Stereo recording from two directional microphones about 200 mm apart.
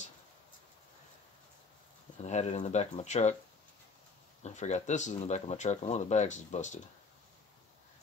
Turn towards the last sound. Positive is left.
turn(degrees=35)  # may be behind; listen again after turning